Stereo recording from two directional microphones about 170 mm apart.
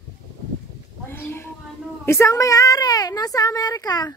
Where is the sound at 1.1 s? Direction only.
15° left (ahead or behind).